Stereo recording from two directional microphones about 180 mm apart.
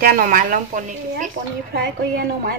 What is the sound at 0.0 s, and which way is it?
A woman's voice, 50° right (ahead or behind).